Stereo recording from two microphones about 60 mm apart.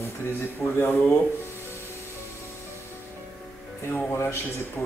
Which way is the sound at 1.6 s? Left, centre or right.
Left.